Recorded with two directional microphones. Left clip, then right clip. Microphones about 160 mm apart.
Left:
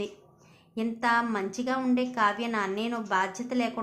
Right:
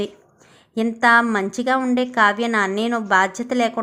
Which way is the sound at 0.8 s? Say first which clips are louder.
Right 11 dB; 45° right (ahead or behind).